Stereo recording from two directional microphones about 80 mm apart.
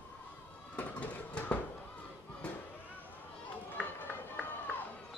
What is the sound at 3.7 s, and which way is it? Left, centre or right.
Run, left.